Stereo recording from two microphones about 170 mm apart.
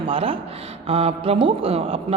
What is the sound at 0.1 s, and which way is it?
A man's voice, 30° right (ahead or behind).